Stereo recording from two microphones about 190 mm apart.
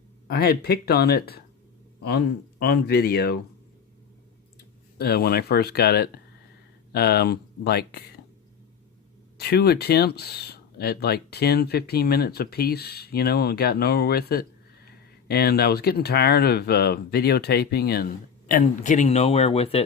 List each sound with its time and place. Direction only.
0.3 s speech: 55° left (ahead or behind)
4.9 s speech: 55° left (ahead or behind)
9.4 s speech: 55° left (ahead or behind)
18.6 s speech: 40° left (ahead or behind)